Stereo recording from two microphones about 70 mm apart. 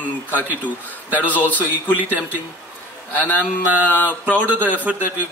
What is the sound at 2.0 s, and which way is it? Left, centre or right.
Speech, right.